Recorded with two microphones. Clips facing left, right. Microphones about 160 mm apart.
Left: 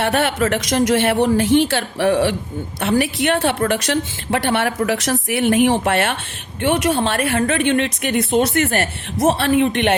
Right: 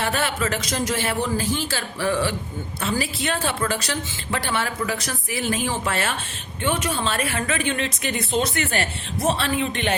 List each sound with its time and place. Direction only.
0.0 s a woman's voice: 60° left (ahead or behind)
4.9 s a woman's voice: 80° left